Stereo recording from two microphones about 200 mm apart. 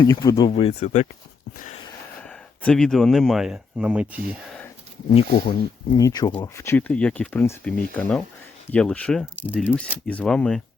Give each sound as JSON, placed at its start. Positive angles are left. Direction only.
{"t": 0.0, "sound": "speech", "side_deg": 20}
{"t": 1.5, "sound": "a sound", "side_deg": 40}
{"t": 2.2, "sound": "speech", "side_deg": 5}
{"t": 5.1, "sound": "speech", "side_deg": 25}
{"t": 8.7, "sound": "speech", "side_deg": 5}
{"t": 9.5, "sound": "speech", "side_deg": -5}
{"t": 10.1, "sound": "speech", "side_deg": 5}